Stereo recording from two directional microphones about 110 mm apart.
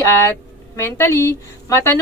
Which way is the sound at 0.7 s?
25° left (ahead or behind).